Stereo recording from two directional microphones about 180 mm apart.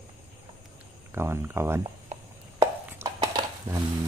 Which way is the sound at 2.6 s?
20° right (ahead or behind).